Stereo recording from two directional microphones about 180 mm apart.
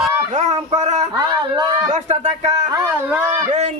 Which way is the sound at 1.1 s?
20° right (ahead or behind).